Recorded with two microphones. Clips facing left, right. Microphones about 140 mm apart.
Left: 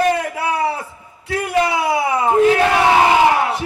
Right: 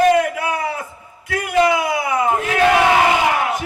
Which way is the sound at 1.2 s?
30° left (ahead or behind).